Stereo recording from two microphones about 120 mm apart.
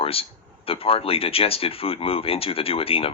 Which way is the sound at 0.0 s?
50° left (ahead or behind).